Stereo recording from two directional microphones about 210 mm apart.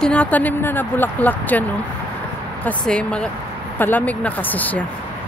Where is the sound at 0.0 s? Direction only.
5° left (ahead or behind).